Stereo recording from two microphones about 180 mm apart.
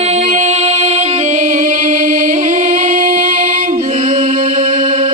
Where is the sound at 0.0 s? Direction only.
40° right (ahead or behind).